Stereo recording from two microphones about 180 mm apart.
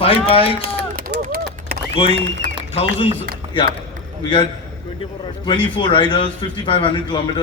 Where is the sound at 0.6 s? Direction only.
55° right (ahead or behind).